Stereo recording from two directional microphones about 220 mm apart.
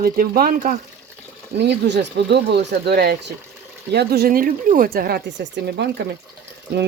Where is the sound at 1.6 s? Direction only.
50° right (ahead or behind).